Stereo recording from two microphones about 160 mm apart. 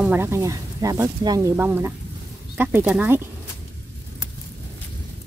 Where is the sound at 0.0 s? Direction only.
15° right (ahead or behind).